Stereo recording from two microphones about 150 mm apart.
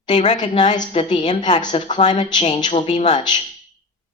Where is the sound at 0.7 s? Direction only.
50° left (ahead or behind).